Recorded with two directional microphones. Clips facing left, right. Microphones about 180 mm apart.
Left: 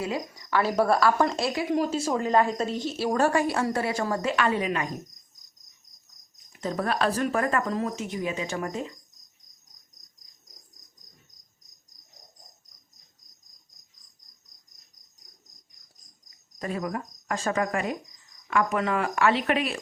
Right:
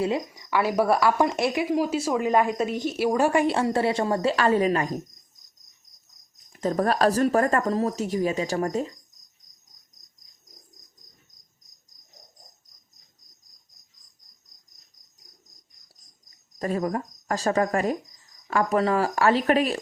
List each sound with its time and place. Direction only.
0.0 s a woman's voice: 25° right (ahead or behind)
0.5 s a woman's voice: 10° right (ahead or behind)
1.7 s a woman's voice: 10° right (ahead or behind)
3.4 s a woman's voice: 25° right (ahead or behind)
6.5 s speech: 40° right (ahead or behind)
16.6 s speech: 40° right (ahead or behind)